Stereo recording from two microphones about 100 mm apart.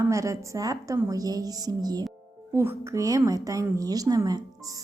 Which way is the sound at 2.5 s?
25° right (ahead or behind).